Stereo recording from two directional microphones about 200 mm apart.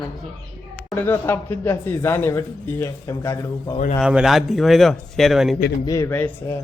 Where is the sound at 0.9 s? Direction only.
10° left (ahead or behind).